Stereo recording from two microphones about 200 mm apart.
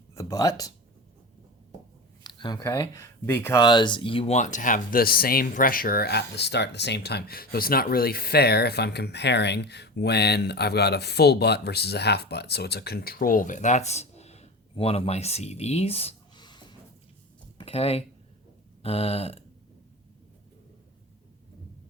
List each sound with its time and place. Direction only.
0.1 s a sound: 15° left (ahead or behind)
2.2 s speech: 20° left (ahead or behind)
18.8 s burping: 30° left (ahead or behind)